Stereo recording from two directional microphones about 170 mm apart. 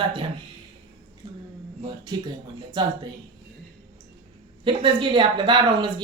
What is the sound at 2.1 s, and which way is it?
Speech, 25° right (ahead or behind).